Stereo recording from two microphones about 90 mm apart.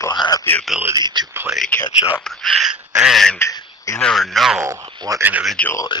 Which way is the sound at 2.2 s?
Centre (ahead or behind).